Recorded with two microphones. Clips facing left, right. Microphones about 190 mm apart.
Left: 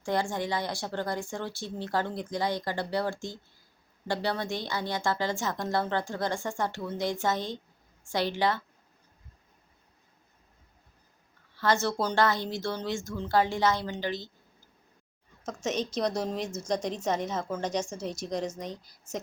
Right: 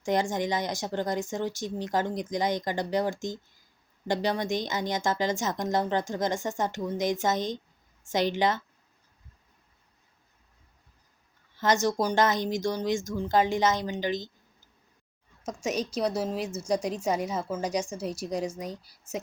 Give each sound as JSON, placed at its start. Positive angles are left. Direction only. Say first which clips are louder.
{"t": 0.0, "sound": "a woman's voice", "louder": "right 3 dB", "side_deg": -20}
{"t": 11.5, "sound": "a woman's voice", "louder": "right 2 dB", "side_deg": -20}
{"t": 15.4, "sound": "a woman's voice", "louder": "right 1 dB", "side_deg": -10}